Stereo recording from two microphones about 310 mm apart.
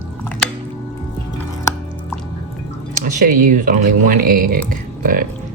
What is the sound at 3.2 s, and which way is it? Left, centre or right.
Speech, right.